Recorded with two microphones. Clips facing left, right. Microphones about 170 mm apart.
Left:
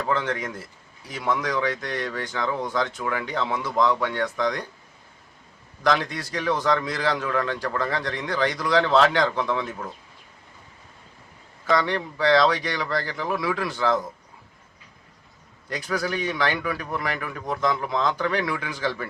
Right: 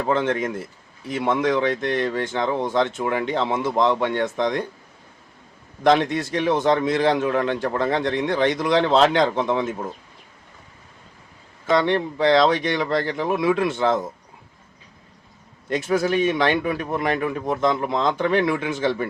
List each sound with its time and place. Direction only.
0.0 s speech: 25° right (ahead or behind)
5.8 s speech: 25° right (ahead or behind)
11.6 s speech: 25° right (ahead or behind)
15.7 s speech: 25° right (ahead or behind)